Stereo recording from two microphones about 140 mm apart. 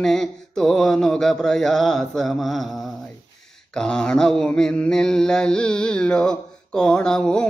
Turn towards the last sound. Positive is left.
turn(degrees=5)  # may be behind; listen again after turning